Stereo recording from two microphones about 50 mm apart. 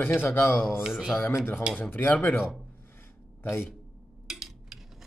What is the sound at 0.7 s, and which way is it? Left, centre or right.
Speech, centre.